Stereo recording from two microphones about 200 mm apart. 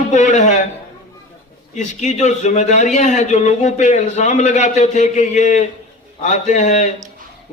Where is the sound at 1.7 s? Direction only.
35° left (ahead or behind).